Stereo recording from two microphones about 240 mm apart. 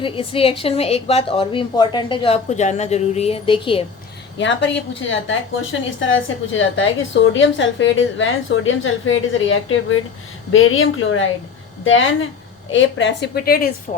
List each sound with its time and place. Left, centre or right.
0.0 s a woman's voice: left
4.4 s a woman's voice: left